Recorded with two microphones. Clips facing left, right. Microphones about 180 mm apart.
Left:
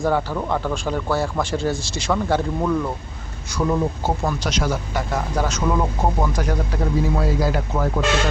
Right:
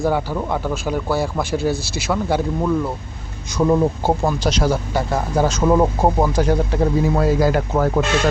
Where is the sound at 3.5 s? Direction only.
25° right (ahead or behind).